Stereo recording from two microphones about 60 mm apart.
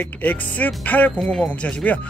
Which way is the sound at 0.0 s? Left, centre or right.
Left.